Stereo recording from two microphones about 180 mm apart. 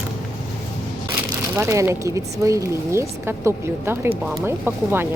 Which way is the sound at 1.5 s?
15° right (ahead or behind).